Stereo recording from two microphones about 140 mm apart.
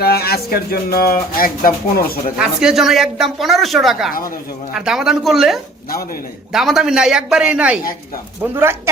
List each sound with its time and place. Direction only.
0.0 s speech: 90° left
2.4 s speech: 5° right (ahead or behind)